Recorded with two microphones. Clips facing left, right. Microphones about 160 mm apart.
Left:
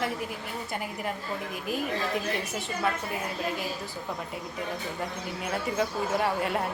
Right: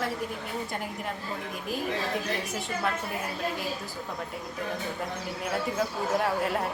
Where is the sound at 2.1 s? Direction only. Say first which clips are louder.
Left 1 dB; centre (ahead or behind).